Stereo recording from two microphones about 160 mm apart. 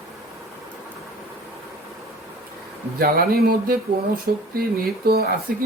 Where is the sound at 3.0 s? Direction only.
70° right (ahead or behind).